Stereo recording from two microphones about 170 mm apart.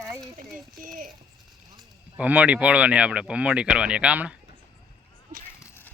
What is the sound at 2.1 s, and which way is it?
Speech, 10° right (ahead or behind).